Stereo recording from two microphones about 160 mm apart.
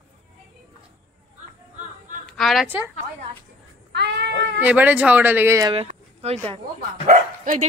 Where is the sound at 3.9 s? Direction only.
90° right.